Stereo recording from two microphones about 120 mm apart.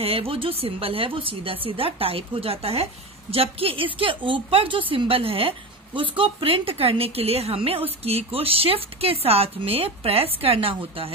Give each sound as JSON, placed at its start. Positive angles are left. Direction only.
{"t": 0.0, "sound": "a woman's voice", "side_deg": -50}